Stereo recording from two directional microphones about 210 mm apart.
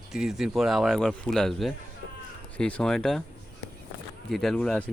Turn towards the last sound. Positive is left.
turn(degrees=5)  # may be behind; listen again after turning